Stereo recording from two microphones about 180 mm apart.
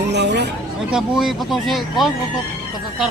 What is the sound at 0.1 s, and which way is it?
Chatter, 70° right (ahead or behind).